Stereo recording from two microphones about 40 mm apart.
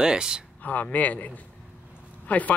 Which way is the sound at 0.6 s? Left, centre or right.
Left.